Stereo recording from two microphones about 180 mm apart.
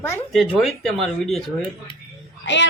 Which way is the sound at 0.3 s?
Centre (ahead or behind).